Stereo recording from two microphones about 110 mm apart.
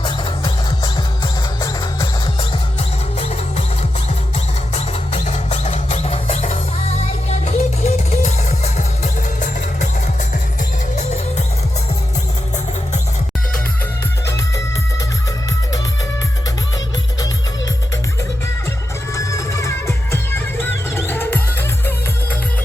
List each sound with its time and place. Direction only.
0.0 s music: 45° left (ahead or behind)
4.7 s music: 75° left (ahead or behind)
19.1 s music: 30° left (ahead or behind)